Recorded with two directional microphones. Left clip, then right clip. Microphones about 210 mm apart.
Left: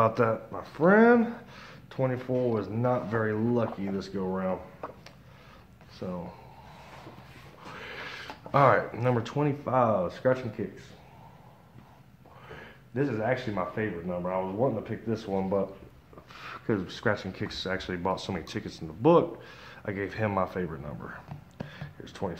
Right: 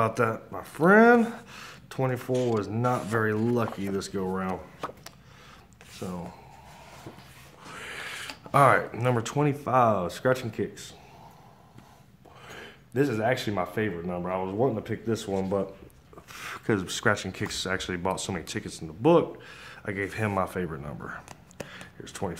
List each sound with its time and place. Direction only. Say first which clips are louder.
0.0 s speech: left 1 dB; 15° right (ahead or behind); by 6.2 s 30° right (ahead or behind)
7.7 s speech: right 3 dB; 20° right (ahead or behind); by 10.8 s 40° right (ahead or behind)
12.4 s speech: right 2 dB; 40° right (ahead or behind); by 22.4 s 25° right (ahead or behind)